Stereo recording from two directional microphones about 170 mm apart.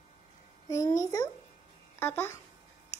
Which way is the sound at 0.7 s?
20° left (ahead or behind).